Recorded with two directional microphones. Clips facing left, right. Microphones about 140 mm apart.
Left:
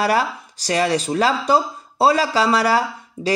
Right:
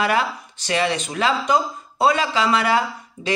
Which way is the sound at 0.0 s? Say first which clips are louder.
Left 2 dB; 35° left (ahead or behind).